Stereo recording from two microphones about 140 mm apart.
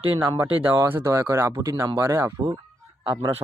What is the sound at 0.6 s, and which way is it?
Speech, 15° right (ahead or behind).